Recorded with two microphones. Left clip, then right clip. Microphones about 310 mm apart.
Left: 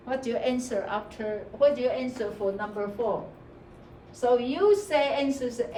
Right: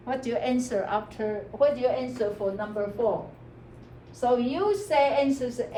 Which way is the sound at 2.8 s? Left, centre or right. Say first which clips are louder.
Right 2 dB; centre.